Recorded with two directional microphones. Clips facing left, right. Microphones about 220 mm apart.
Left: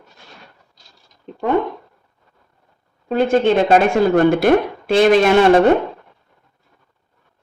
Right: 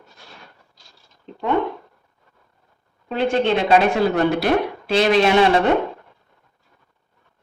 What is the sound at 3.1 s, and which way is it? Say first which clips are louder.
A woman's voice: left 4 dB; 45° left (ahead or behind).